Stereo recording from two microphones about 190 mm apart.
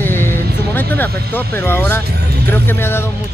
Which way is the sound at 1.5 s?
10° left (ahead or behind).